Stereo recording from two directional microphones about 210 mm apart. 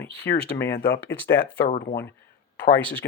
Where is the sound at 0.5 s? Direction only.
10° left (ahead or behind).